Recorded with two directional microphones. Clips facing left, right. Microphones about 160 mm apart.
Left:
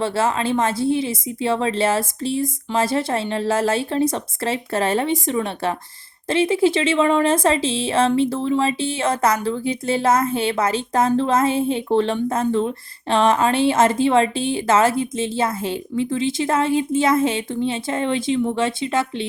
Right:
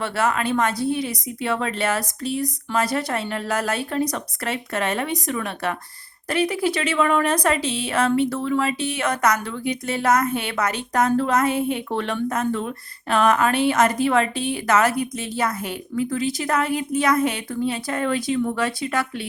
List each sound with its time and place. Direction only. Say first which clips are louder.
0.0 s speech: left 2 dB; 25° left (ahead or behind)